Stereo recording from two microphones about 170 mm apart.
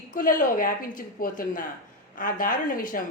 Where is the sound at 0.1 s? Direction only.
50° left (ahead or behind).